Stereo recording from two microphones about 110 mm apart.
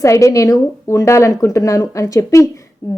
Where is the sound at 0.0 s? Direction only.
25° left (ahead or behind).